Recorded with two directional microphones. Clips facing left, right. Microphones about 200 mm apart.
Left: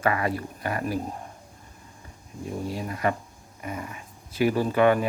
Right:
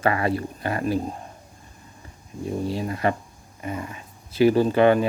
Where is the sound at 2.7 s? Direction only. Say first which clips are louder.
Right 2 dB; 30° right (ahead or behind).